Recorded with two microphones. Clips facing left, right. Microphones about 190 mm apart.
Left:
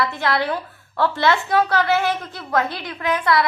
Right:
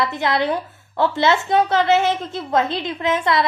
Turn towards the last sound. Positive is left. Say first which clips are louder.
# right 1 dB
turn(degrees=-25)  # may be behind; listen again after turning